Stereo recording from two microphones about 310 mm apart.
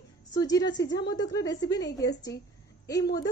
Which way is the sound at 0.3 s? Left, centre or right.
Centre.